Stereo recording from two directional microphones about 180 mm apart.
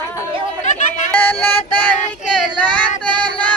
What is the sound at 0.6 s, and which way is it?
Chatter, 45° left (ahead or behind).